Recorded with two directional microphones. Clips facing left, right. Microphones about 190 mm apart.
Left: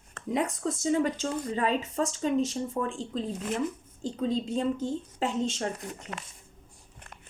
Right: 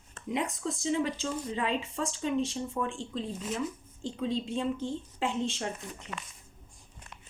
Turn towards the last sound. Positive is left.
turn(degrees=40)  # may be behind; listen again after turning